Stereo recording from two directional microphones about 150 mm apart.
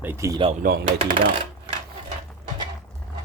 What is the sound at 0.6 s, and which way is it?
Speech, 80° right.